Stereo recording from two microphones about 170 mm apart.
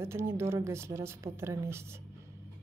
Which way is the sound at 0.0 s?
15° right (ahead or behind).